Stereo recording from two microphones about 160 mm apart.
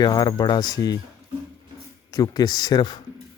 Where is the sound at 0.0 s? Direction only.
25° left (ahead or behind).